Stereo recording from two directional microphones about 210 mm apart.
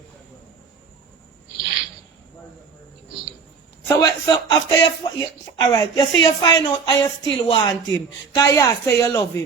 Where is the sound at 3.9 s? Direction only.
20° left (ahead or behind).